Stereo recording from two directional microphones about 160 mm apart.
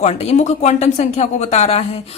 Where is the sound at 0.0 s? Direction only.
40° left (ahead or behind).